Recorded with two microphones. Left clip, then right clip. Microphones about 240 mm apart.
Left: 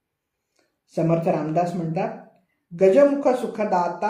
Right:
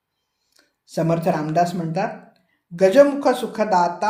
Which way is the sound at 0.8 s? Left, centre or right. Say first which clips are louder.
Right 1 dB; right.